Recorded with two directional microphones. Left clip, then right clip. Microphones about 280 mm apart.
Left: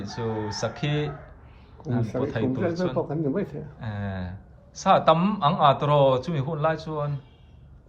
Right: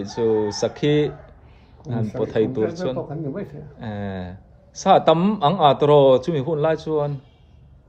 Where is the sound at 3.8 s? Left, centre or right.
Right.